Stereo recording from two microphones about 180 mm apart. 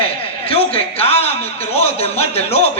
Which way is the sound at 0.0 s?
30° left (ahead or behind).